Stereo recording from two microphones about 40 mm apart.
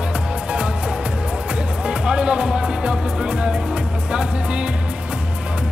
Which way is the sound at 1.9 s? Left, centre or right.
Right.